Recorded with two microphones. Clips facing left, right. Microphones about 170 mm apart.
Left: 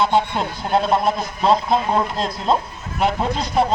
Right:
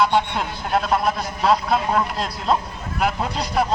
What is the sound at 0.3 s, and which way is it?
A man's voice, 25° left (ahead or behind).